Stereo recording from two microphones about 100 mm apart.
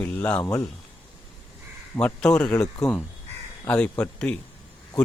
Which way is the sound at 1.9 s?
10° left (ahead or behind).